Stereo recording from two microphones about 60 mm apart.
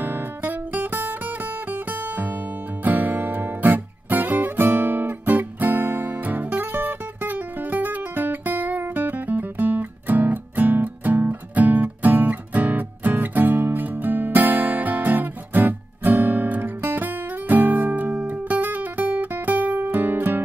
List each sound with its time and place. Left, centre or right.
0.0 s music: right